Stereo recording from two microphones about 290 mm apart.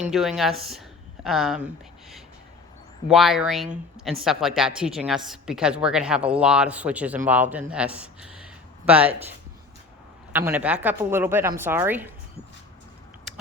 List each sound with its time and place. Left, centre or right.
0.0 s a woman's voice: centre
10.3 s a woman's voice: centre